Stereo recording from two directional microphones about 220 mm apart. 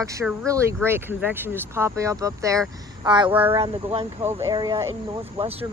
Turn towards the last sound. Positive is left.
turn(degrees=-25)  # may be behind; listen again after turning